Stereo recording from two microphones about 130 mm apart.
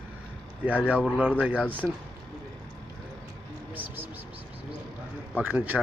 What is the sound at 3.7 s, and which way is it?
Vehicle, 15° right (ahead or behind).